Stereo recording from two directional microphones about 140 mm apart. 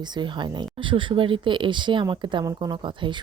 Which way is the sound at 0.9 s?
35° right (ahead or behind).